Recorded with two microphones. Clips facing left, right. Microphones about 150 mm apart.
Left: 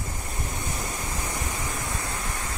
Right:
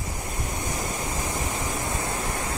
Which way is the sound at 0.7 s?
25° right (ahead or behind).